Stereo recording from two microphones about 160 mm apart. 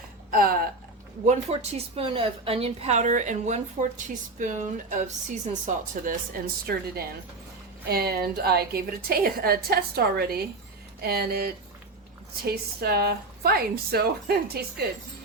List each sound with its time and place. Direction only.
0.3 s a sound: 65° right (ahead or behind)
1.2 s a woman's voice: 50° right (ahead or behind)
2.0 s a woman's voice: 35° right (ahead or behind); by 7.0 s 65° right (ahead or behind)
7.9 s a woman's voice: 75° right (ahead or behind)